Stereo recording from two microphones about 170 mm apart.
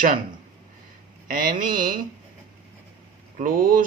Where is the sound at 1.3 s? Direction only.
55° right (ahead or behind).